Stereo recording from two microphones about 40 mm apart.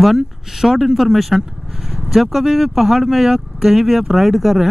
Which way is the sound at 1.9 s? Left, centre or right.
Centre.